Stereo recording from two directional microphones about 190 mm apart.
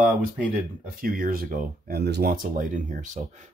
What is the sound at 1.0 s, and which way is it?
Speech, 50° right (ahead or behind).